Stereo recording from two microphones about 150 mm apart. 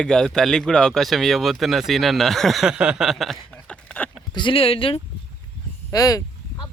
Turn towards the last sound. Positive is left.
turn(degrees=25)  # may be behind; listen again after turning